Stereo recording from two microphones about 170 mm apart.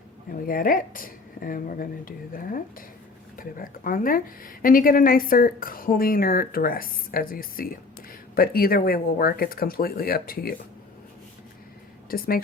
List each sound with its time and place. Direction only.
0.3 s a woman's voice: 55° left (ahead or behind)
12.1 s a woman's voice: 60° left (ahead or behind)